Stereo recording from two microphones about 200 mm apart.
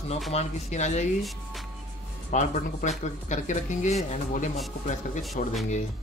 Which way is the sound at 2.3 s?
35° left (ahead or behind).